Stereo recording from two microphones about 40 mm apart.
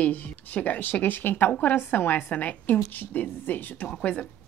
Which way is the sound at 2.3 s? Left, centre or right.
Left.